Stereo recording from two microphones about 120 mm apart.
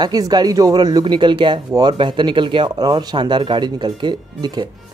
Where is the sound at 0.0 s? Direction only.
35° right (ahead or behind).